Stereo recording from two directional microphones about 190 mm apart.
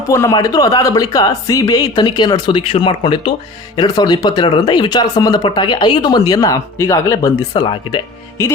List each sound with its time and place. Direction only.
0.1 s speech: 15° left (ahead or behind)